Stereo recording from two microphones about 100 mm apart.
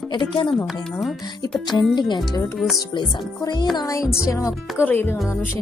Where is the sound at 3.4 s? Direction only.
45° left (ahead or behind).